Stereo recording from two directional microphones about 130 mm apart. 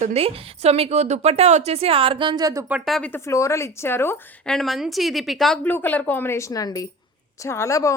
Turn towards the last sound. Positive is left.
turn(degrees=25)  # may be behind; listen again after turning